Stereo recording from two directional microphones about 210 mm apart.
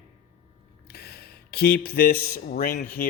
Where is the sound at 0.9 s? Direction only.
50° left (ahead or behind).